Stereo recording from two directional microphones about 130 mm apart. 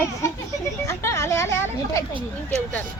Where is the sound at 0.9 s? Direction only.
20° left (ahead or behind).